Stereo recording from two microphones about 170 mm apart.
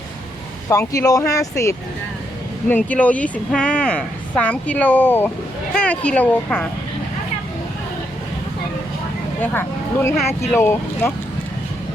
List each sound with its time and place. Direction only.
0.7 s a woman's voice: 20° left (ahead or behind)
9.4 s a woman's voice: 15° left (ahead or behind)